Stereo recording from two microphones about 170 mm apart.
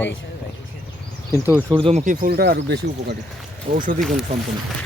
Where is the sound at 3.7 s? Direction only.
55° right (ahead or behind).